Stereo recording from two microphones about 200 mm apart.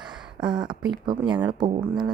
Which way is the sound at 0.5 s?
20° right (ahead or behind).